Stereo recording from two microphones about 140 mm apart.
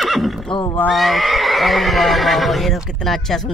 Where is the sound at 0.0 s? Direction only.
Centre (ahead or behind).